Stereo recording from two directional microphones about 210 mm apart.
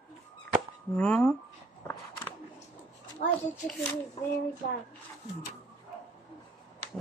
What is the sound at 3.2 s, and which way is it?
Speech, 45° left (ahead or behind).